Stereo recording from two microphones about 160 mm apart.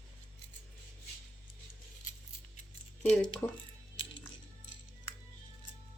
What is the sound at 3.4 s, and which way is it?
Speech, 15° left (ahead or behind).